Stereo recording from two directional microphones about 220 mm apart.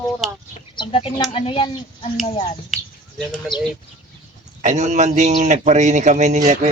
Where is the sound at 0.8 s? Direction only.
25° left (ahead or behind).